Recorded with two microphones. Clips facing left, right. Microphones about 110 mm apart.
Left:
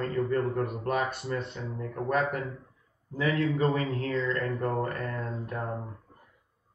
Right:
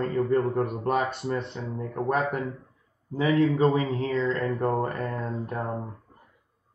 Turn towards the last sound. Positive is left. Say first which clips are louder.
# right 3 dB
turn(degrees=-30)  # may be behind; listen again after turning